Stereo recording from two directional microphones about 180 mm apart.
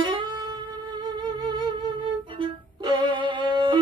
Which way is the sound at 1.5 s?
25° right (ahead or behind).